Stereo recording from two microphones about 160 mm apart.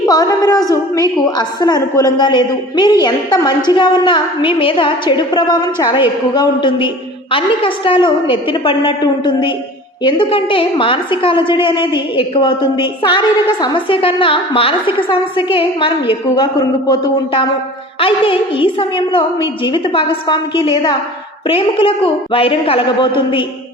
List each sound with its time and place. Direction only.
0.0 s a woman's voice: 20° left (ahead or behind)